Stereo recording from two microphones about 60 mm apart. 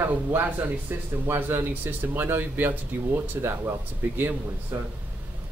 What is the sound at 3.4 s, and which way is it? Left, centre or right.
Speech, right.